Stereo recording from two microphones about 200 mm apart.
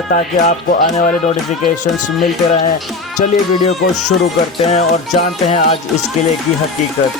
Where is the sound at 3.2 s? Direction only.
40° left (ahead or behind).